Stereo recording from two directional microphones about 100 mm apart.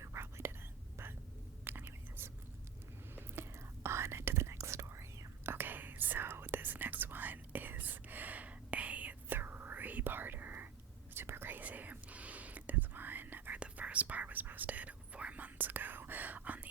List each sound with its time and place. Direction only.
0.0 s whispering: 30° right (ahead or behind)
1.6 s whispering: 20° right (ahead or behind)